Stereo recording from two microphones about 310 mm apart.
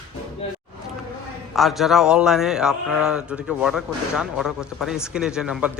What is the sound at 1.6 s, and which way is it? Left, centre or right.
A man's voice, centre.